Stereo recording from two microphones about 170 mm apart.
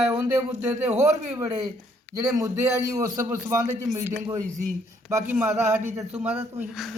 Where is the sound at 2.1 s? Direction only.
20° right (ahead or behind).